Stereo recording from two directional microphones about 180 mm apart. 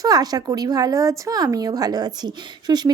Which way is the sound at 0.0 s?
20° right (ahead or behind).